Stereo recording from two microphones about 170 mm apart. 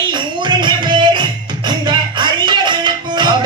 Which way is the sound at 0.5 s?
25° right (ahead or behind).